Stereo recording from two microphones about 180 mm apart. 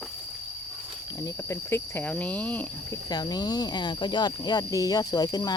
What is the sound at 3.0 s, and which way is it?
Speech, 20° left (ahead or behind).